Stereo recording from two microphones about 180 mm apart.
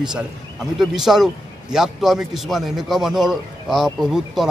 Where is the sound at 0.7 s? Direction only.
Centre (ahead or behind).